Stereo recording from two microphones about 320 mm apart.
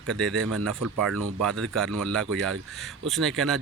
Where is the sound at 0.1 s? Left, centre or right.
Centre.